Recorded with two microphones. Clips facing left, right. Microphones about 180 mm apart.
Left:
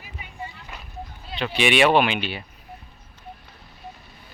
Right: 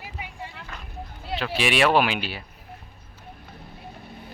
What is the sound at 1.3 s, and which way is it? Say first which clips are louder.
Speech: left 3 dB; centre (ahead or behind).